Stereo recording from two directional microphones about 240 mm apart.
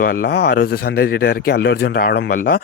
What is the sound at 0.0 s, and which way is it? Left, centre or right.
Speech, left.